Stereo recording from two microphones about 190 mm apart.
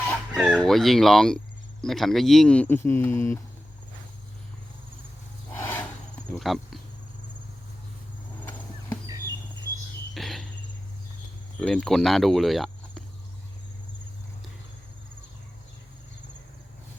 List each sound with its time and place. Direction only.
0.3 s speech: 5° right (ahead or behind); by 3.4 s 15° left (ahead or behind)
5.5 s a sound: 10° left (ahead or behind)
5.8 s insect: 5° left (ahead or behind)
8.4 s a sound: 10° left (ahead or behind)
10.2 s cricket: centre (ahead or behind)
11.6 s speech: 5° left (ahead or behind)